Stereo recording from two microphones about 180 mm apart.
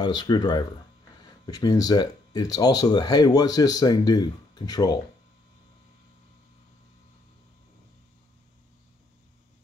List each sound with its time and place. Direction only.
0.0 s speech: 25° left (ahead or behind)